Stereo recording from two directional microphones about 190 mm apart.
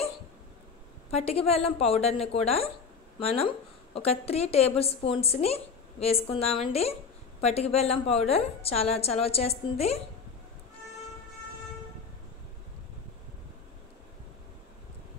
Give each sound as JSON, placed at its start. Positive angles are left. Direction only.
{"t": 1.1, "sound": "a woman's voice", "side_deg": 30}